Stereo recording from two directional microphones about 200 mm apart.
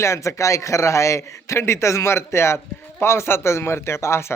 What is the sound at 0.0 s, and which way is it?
A man's voice, 15° left (ahead or behind).